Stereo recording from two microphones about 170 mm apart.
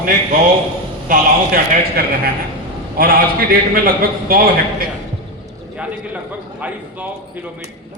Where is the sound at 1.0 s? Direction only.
55° right (ahead or behind).